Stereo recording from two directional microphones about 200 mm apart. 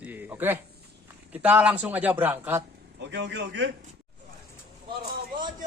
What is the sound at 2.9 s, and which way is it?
Speech, 60° right (ahead or behind).